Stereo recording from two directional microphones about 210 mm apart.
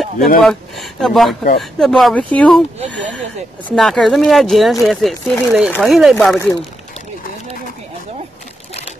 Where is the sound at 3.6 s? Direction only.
Centre (ahead or behind).